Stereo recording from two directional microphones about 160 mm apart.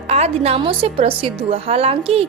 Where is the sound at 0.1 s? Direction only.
40° right (ahead or behind).